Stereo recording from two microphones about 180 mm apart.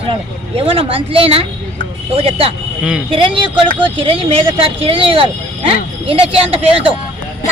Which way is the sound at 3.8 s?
30° right (ahead or behind).